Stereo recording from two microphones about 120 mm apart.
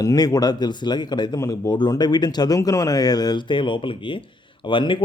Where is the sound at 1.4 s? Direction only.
25° left (ahead or behind).